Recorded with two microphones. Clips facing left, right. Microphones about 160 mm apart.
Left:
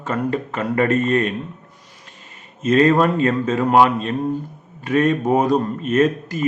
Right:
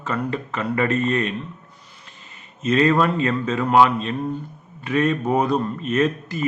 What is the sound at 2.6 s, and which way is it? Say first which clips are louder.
Speech: left 3 dB; 45° left (ahead or behind).